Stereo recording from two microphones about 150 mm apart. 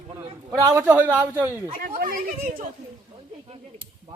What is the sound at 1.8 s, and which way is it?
Speech, 70° right (ahead or behind).